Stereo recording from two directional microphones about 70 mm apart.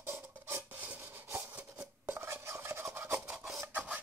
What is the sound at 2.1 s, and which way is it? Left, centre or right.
Stir, right.